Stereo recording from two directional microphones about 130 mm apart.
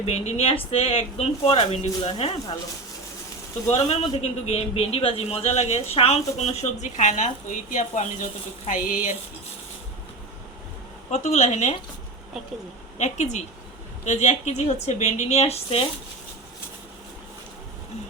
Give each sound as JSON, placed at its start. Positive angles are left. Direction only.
{"t": 0.0, "sound": "speech", "side_deg": 55}
{"t": 3.7, "sound": "a man's voice", "side_deg": 50}
{"t": 11.1, "sound": "a man's voice", "side_deg": 60}
{"t": 13.0, "sound": "a man's voice", "side_deg": 65}